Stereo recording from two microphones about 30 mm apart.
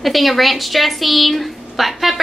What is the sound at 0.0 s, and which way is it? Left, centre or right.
A woman's voice, centre.